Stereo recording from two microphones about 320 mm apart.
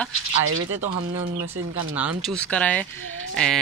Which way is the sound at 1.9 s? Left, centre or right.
Centre.